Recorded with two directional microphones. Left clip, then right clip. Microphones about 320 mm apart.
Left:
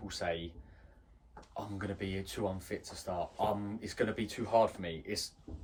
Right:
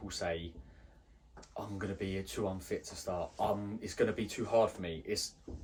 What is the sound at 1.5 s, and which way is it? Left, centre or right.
Speech, centre.